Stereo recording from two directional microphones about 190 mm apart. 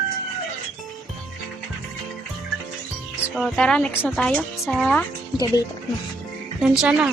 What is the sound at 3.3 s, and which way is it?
Speech, 5° left (ahead or behind).